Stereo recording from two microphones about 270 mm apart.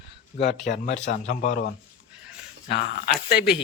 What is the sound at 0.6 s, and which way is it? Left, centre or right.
Speech, left.